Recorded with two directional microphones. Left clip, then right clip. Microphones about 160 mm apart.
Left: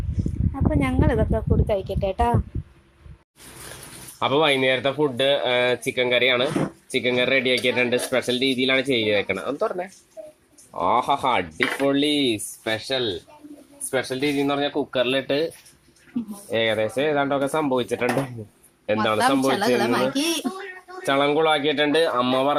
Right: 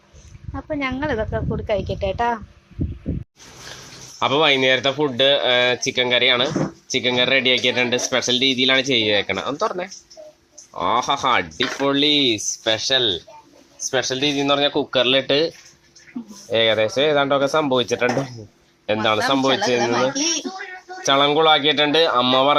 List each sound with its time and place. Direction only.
0.5 s speech: 10° left (ahead or behind)
4.2 s speech: centre (ahead or behind)
19.8 s speech: 90° left
21.0 s speech: centre (ahead or behind)